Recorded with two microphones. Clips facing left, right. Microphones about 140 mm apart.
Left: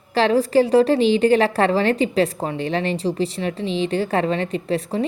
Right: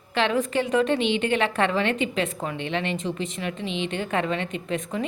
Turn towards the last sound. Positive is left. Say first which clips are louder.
# left 6 dB
turn(degrees=35)  # may be behind; listen again after turning